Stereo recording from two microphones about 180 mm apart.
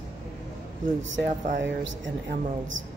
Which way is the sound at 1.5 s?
90° right.